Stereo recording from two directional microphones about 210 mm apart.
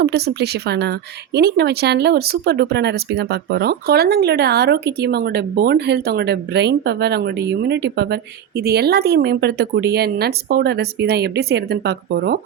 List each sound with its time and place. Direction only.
0.0 s speech: 50° right (ahead or behind)